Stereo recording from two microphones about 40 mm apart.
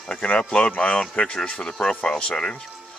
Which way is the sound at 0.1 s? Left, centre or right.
Left.